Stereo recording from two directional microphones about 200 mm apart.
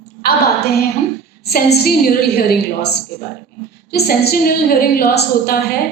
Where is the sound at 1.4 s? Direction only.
50° left (ahead or behind).